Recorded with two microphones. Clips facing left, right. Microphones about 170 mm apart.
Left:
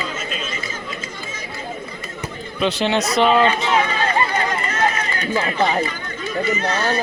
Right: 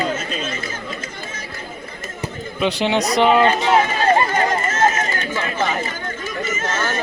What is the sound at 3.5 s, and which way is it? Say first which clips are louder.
Run: right 3 dB; 45° right (ahead or behind).